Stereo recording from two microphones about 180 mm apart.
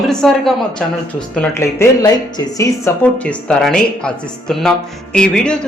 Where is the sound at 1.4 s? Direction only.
15° left (ahead or behind).